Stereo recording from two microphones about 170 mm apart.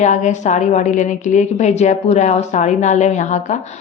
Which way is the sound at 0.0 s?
45° left (ahead or behind).